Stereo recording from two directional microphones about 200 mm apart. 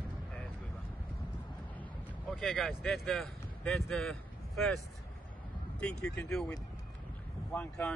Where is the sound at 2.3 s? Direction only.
Centre (ahead or behind).